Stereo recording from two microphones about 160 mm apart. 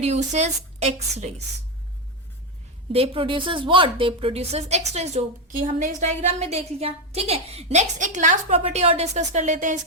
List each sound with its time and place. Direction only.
0.0 s a woman's voice: 45° right (ahead or behind)
2.9 s a woman's voice: 35° right (ahead or behind)